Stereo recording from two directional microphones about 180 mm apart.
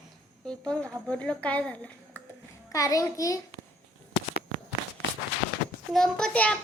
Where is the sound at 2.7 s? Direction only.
20° left (ahead or behind).